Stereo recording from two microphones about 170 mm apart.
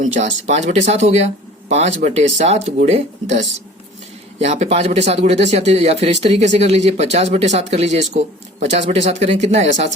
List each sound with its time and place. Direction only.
0.0 s speech: 45° right (ahead or behind)